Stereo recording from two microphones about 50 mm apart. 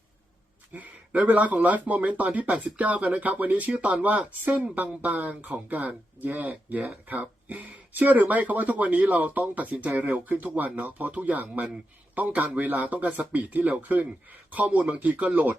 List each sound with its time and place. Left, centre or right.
0.7 s speech: right